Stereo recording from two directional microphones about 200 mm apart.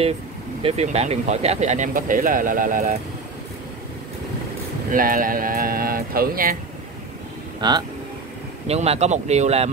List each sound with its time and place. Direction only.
0.6 s speech: 30° right (ahead or behind)
4.9 s speech: 45° right (ahead or behind)
7.6 s speech: 20° right (ahead or behind)